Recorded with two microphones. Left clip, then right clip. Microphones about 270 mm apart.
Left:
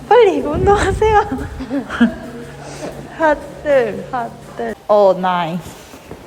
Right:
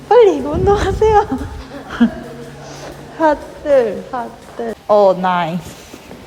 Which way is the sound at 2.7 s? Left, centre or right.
Centre.